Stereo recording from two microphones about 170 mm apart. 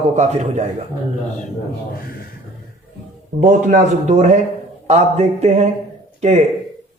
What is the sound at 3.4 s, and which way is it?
A man's voice, 50° right (ahead or behind).